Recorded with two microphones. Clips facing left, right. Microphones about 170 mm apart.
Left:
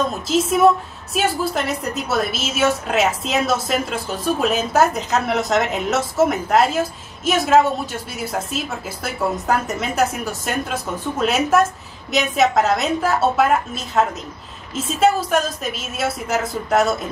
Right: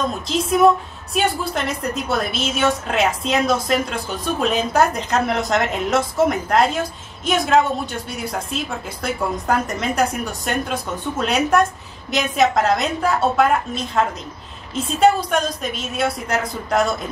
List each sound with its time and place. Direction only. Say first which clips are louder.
0.3 s a woman's voice: even; centre (ahead or behind)